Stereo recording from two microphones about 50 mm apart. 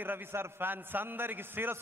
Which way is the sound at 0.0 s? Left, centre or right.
Right.